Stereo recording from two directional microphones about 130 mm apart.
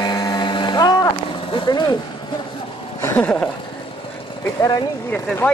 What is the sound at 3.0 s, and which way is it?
Speech, 15° left (ahead or behind).